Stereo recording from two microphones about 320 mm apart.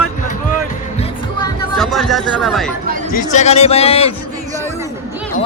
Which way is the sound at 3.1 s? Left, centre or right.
Left.